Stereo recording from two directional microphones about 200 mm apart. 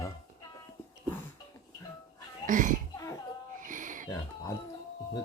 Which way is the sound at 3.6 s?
40° right (ahead or behind).